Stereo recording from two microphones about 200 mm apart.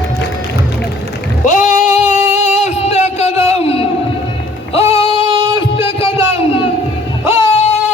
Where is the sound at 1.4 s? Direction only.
40° left (ahead or behind).